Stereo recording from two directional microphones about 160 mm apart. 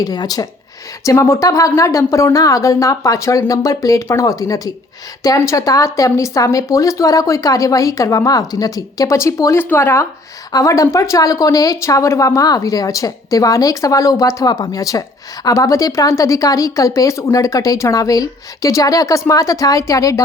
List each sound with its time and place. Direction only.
0.0 s speech: 25° left (ahead or behind)